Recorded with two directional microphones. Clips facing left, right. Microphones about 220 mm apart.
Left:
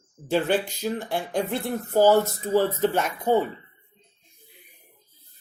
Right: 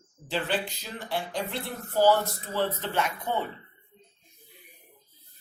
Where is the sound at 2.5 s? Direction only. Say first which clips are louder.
Left 7 dB; 45° left (ahead or behind).